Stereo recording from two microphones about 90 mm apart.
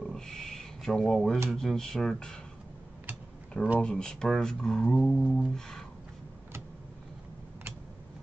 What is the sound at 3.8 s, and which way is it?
Speech, 10° left (ahead or behind).